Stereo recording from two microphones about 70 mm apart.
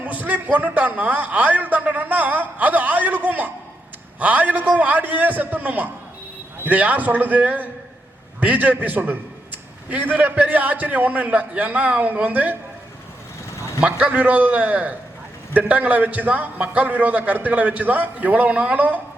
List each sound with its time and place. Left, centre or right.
0.0 s a man's voice: right
13.8 s a man's voice: right